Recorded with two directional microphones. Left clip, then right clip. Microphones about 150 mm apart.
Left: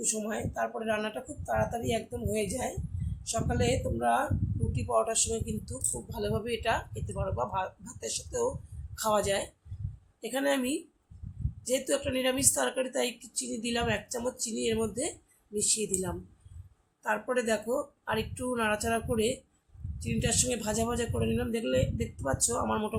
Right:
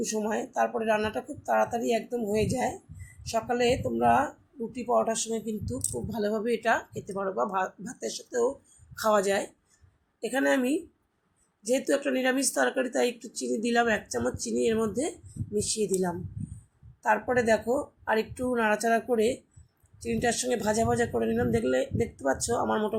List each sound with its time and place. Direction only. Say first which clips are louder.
0.0 s speech: right 4 dB; 25° right (ahead or behind)
4.7 s speech: right 3 dB; 10° right (ahead or behind)